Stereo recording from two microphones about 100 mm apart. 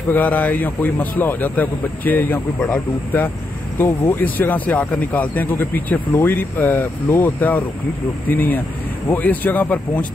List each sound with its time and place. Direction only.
0.1 s a man's voice: 15° left (ahead or behind)